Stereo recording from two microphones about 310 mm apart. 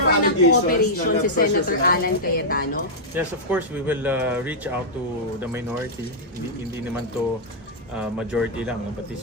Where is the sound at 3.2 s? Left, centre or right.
Centre.